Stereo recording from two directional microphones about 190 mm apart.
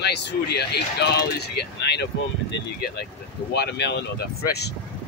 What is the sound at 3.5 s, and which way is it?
Speech, 60° left (ahead or behind).